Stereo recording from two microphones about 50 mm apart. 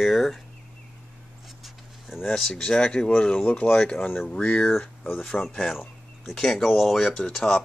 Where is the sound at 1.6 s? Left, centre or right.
Centre.